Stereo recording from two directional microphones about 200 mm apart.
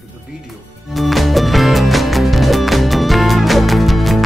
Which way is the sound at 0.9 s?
Centre (ahead or behind).